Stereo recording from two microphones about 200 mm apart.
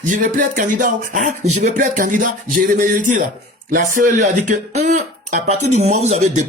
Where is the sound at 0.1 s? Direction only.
40° right (ahead or behind).